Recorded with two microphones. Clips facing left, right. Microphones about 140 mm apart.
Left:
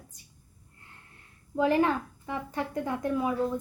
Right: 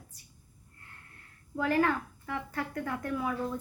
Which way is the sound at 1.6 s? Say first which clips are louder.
Left 3 dB; 20° left (ahead or behind).